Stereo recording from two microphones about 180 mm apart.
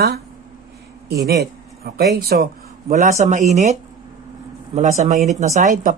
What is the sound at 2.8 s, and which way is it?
Speech, 40° right (ahead or behind).